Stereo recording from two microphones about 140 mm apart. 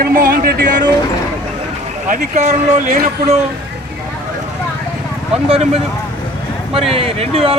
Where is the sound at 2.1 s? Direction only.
55° right (ahead or behind); by 3.1 s 80° right.